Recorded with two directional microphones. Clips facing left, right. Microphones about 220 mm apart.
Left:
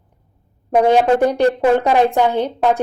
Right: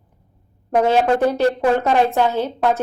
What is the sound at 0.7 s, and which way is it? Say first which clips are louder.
A woman's voice: left 3 dB; 15° left (ahead or behind).